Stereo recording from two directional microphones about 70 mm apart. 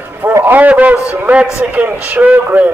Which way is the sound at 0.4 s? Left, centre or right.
Right.